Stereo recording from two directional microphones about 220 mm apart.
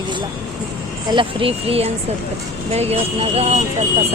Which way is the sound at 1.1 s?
25° right (ahead or behind).